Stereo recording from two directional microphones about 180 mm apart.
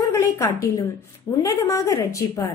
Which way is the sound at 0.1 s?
20° left (ahead or behind).